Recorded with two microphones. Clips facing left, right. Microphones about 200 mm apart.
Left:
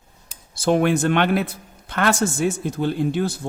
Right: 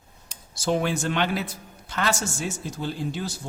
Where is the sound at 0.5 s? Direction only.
55° left (ahead or behind).